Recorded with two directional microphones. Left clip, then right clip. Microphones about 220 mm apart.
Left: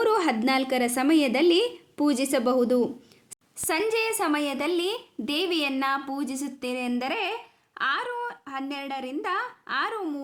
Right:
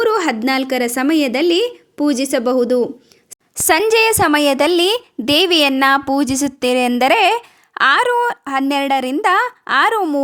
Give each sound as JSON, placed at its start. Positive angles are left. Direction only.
{"t": 0.0, "sound": "a woman's voice", "side_deg": -30}
{"t": 3.5, "sound": "a woman's voice", "side_deg": -45}